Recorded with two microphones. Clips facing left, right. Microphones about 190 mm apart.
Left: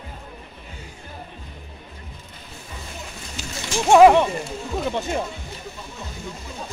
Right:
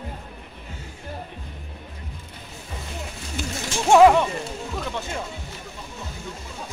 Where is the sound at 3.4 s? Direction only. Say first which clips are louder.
Right 6 dB; 55° right (ahead or behind).